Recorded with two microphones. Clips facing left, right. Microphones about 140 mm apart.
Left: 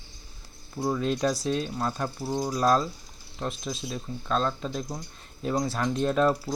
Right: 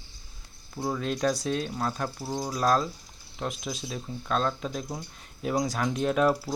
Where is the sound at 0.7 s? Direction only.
Centre (ahead or behind).